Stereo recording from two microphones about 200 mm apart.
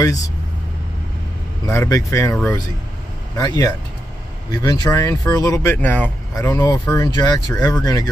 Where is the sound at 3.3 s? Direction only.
20° left (ahead or behind).